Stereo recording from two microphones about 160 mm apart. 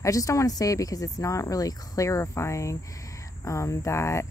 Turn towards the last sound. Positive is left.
turn(degrees=20)  # may be behind; listen again after turning